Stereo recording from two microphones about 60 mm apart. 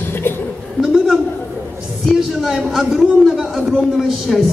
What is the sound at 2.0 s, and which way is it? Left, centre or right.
A man's voice, centre.